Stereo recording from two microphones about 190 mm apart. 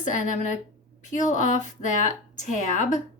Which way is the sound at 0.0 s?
40° left (ahead or behind).